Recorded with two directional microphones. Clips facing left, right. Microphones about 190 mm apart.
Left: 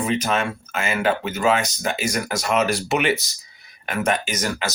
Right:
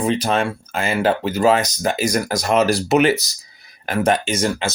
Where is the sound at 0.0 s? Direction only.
35° right (ahead or behind).